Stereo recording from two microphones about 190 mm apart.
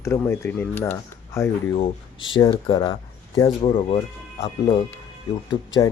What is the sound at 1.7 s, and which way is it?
Speech, 30° left (ahead or behind).